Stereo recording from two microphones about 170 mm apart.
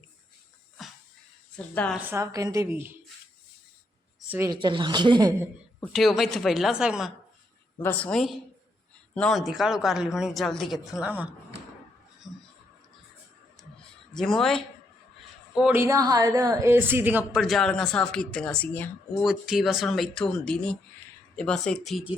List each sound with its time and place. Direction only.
1.5 s a woman's voice: 10° left (ahead or behind)
1.9 s a woman's voice: 10° right (ahead or behind)
4.3 s a woman's voice: 15° right (ahead or behind)
4.5 s a woman's voice: 30° right (ahead or behind)
5.8 s speech: centre (ahead or behind)
7.8 s a woman's voice: 10° left (ahead or behind); by 11.3 s 5° right (ahead or behind)
14.1 s speech: 5° left (ahead or behind)
15.5 s a woman's voice: 10° right (ahead or behind); by 18.9 s 10° left (ahead or behind)
19.2 s speech: 5° right (ahead or behind)